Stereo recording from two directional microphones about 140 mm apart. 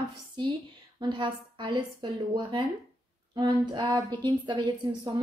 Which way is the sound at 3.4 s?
25° right (ahead or behind).